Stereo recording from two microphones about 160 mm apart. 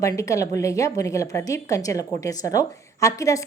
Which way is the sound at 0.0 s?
20° left (ahead or behind).